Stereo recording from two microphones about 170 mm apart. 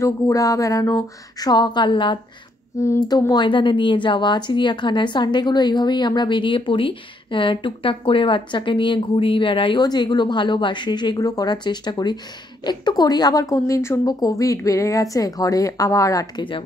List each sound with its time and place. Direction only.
0.0 s speech: 20° left (ahead or behind)
2.8 s a child's voice: 20° left (ahead or behind)